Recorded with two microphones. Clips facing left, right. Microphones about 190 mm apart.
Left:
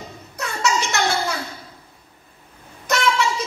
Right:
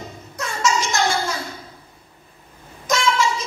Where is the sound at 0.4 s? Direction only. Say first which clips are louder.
Right 1 dB; 65° left (ahead or behind).